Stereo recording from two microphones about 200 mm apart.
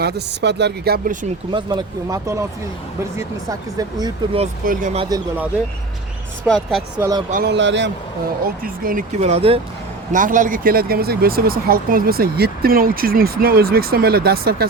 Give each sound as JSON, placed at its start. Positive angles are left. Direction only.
{"t": 0.0, "sound": "speech", "side_deg": -55}
{"t": 1.5, "sound": "speech", "side_deg": -20}
{"t": 4.6, "sound": "speech", "side_deg": -45}
{"t": 4.9, "sound": "speech", "side_deg": -20}
{"t": 6.5, "sound": "speech", "side_deg": 0}
{"t": 7.0, "sound": "speech", "side_deg": -20}
{"t": 7.3, "sound": "speech", "side_deg": -45}
{"t": 7.5, "sound": "a man's voice", "side_deg": -65}
{"t": 8.6, "sound": "speech", "side_deg": -45}
{"t": 10.1, "sound": "speech", "side_deg": -40}